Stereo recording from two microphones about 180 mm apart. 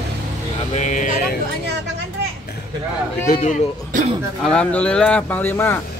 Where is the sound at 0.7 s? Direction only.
40° left (ahead or behind).